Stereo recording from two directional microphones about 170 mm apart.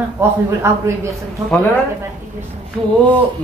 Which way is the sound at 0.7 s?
15° right (ahead or behind).